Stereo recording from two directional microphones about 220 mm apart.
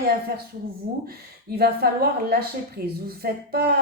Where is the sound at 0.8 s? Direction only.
45° right (ahead or behind).